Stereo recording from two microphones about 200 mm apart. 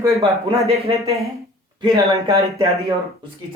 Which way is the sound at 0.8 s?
30° right (ahead or behind).